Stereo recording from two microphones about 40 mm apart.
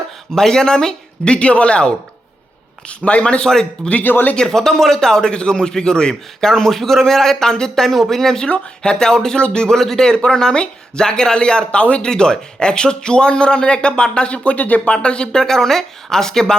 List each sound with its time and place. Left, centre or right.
0.3 s a man's voice: centre
3.0 s a man's voice: left
4.0 s speech: left
4.4 s a man's voice: centre
8.4 s a man's voice: left
9.7 s a man's voice: centre; by 12.0 s left
12.0 s a man's voice: centre
14.5 s speech: left
14.9 s a man's voice: left